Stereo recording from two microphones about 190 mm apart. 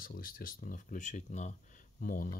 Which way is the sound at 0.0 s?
50° left (ahead or behind).